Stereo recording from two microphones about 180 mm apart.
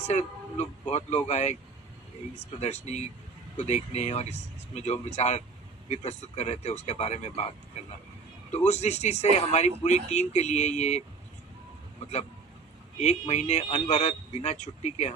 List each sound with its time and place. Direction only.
0.1 s speech: 40° left (ahead or behind)
2.6 s speech: 40° left (ahead or behind)